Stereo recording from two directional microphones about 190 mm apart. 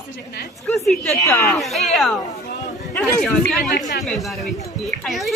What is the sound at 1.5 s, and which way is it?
Speech, centre (ahead or behind).